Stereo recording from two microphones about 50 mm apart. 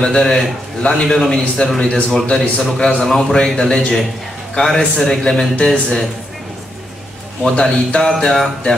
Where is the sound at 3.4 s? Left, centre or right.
Centre.